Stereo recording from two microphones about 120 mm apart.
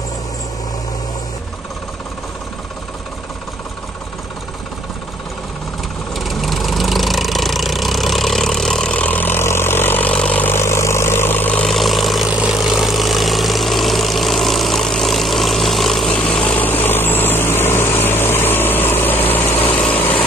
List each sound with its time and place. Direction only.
6.1 s vehicle: centre (ahead or behind)
11.6 s vehicle: centre (ahead or behind)
16.4 s vehicle: 15° left (ahead or behind)